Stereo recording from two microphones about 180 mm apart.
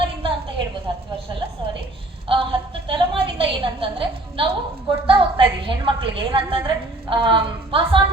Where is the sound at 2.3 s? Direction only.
30° right (ahead or behind).